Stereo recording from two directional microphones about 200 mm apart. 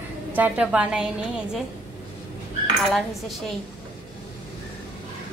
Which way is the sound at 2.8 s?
Centre (ahead or behind).